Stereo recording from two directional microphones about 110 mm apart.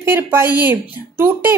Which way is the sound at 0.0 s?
20° right (ahead or behind).